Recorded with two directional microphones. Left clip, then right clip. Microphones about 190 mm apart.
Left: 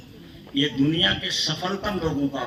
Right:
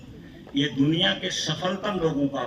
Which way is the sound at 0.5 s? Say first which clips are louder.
Left 1 dB; 20° right (ahead or behind).